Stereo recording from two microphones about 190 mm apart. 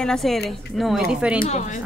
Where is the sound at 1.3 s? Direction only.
35° left (ahead or behind).